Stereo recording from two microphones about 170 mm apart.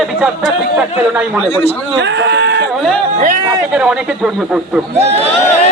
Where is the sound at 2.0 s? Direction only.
90° right.